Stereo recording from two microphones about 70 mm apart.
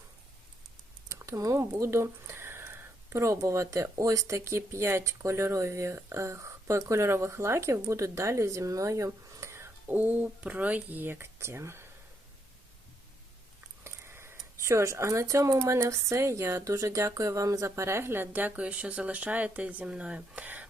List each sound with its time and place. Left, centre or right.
1.0 s a sound: right
1.5 s speech: right
9.9 s speech: right
13.8 s sniff: right
14.6 s speech: right